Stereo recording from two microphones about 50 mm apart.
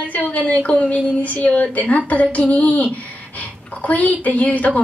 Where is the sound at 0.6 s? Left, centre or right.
Left.